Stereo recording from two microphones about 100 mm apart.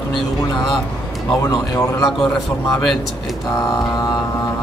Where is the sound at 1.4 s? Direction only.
35° left (ahead or behind).